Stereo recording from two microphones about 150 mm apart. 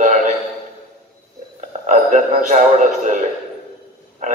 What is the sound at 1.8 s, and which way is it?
A man's voice, 55° right (ahead or behind).